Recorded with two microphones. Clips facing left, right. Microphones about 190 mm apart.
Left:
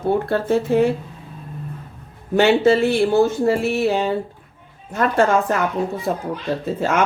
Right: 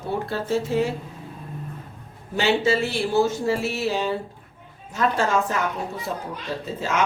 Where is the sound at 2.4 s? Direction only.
55° left (ahead or behind).